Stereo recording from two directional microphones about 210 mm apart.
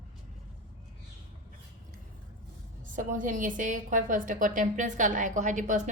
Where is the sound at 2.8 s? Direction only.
40° right (ahead or behind).